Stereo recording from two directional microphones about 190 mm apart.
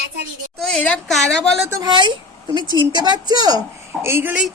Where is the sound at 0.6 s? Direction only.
5° left (ahead or behind).